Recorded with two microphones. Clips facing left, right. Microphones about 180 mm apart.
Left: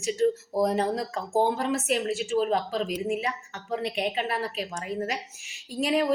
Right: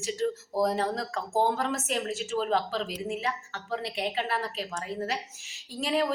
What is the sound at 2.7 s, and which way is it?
A woman's voice, 15° left (ahead or behind).